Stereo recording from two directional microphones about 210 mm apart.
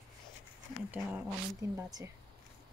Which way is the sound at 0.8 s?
5° right (ahead or behind).